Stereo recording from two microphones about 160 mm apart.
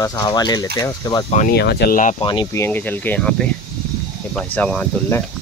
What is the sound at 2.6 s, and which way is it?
Speech, 10° left (ahead or behind).